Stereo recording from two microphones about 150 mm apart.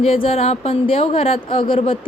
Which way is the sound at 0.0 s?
40° left (ahead or behind).